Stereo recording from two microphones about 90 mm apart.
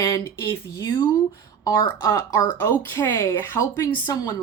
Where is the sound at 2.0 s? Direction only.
30° left (ahead or behind).